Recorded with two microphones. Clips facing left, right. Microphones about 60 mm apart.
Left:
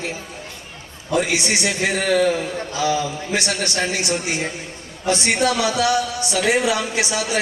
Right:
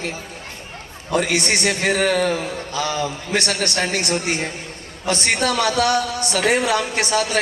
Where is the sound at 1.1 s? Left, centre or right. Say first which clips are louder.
Even; right.